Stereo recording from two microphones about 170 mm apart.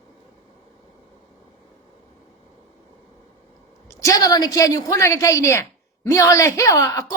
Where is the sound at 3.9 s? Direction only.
20° left (ahead or behind).